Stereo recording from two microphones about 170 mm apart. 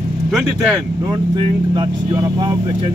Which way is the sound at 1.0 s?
25° right (ahead or behind).